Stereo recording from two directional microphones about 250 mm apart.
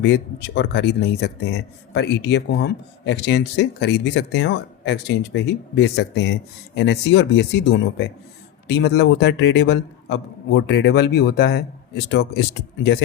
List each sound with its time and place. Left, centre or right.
0.0 s speech: left